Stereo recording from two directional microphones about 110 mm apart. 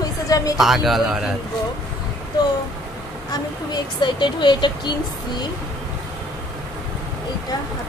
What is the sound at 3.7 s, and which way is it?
Speech, 45° left (ahead or behind).